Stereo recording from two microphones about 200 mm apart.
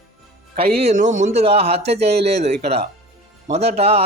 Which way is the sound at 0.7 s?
35° right (ahead or behind).